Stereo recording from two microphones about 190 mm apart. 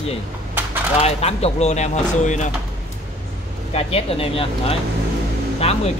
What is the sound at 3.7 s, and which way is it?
Speech, 30° left (ahead or behind).